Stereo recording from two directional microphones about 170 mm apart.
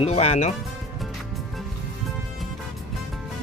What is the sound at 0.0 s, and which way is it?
Speech, 40° left (ahead or behind).